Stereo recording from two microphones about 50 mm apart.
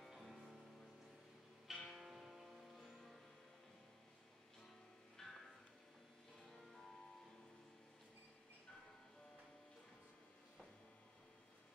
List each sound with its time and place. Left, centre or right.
0.1 s music: centre
1.7 s music: centre
5.2 s music: centre
6.4 s music: centre